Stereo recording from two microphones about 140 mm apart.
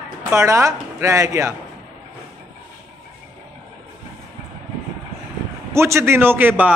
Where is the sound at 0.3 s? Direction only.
20° right (ahead or behind).